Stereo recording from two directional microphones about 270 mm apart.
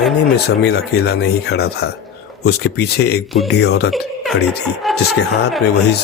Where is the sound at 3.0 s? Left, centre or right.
Left.